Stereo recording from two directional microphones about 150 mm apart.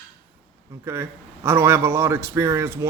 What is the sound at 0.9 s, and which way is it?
A man's voice, 15° right (ahead or behind).